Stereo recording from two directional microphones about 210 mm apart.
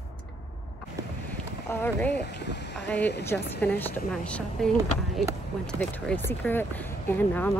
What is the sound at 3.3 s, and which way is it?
A woman's voice, 5° left (ahead or behind).